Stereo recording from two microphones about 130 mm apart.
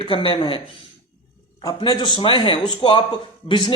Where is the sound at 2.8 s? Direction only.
50° left (ahead or behind).